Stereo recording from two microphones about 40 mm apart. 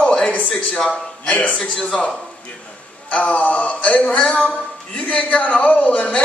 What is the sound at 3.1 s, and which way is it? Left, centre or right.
A man's voice, left.